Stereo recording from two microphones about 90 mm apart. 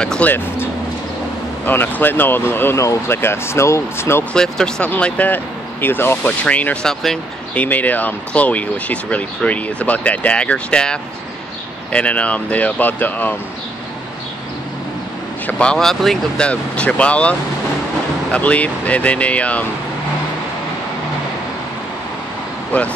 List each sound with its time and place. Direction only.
0.0 s speech: 10° left (ahead or behind)
1.7 s speech: 20° left (ahead or behind)
4.3 s speech: 10° left (ahead or behind)
6.9 s speech: centre (ahead or behind)
7.5 s speech: 20° left (ahead or behind)
15.4 s speech: 10° left (ahead or behind)
16.4 s speech: 15° left (ahead or behind)